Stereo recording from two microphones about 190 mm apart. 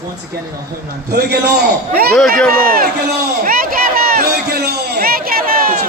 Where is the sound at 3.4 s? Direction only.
50° right (ahead or behind).